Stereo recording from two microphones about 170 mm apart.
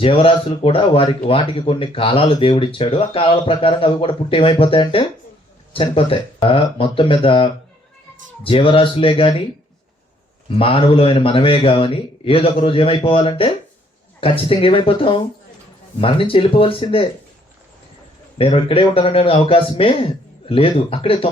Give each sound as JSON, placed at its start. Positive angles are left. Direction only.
{"t": 0.0, "sound": "speech", "side_deg": 35}
{"t": 10.5, "sound": "speech", "side_deg": 35}
{"t": 18.3, "sound": "speech", "side_deg": 35}